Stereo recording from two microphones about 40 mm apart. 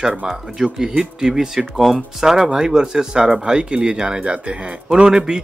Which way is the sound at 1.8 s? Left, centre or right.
Centre.